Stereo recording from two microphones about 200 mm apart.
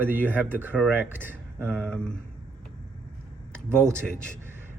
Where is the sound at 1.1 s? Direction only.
10° right (ahead or behind).